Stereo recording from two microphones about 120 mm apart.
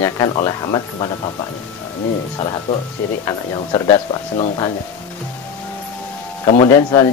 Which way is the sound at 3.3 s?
35° left (ahead or behind).